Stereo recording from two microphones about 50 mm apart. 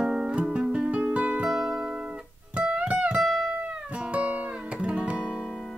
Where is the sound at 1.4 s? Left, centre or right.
Centre.